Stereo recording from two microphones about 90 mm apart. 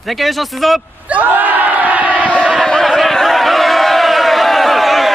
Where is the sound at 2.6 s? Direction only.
5° left (ahead or behind).